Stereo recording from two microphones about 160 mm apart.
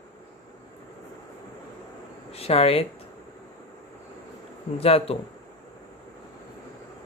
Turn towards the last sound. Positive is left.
turn(degrees=40)  # may be behind; listen again after turning